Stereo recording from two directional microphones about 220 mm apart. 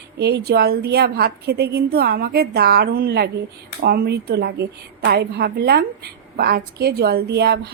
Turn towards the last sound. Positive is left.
turn(degrees=-45)  # may be behind; listen again after turning